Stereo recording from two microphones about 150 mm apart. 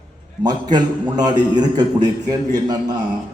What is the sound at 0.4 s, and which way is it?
A man's voice, 30° right (ahead or behind).